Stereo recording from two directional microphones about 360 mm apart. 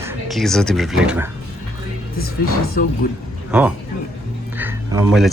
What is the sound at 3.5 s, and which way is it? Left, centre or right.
Speech, centre.